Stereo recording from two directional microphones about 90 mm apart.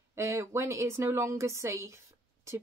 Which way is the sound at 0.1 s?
30° right (ahead or behind).